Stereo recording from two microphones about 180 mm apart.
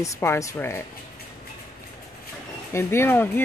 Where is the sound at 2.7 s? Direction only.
15° left (ahead or behind).